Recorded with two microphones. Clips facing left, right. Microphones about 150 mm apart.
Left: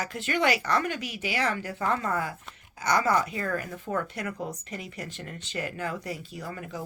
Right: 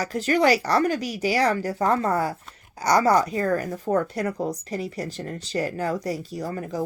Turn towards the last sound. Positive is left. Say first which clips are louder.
# right 8 dB
turn(degrees=-40)  # may be behind; listen again after turning